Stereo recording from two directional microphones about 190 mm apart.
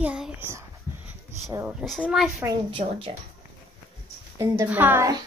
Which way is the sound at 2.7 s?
25° right (ahead or behind).